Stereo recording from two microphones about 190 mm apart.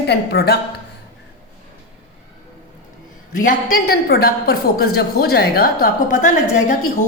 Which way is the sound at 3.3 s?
45° left (ahead or behind).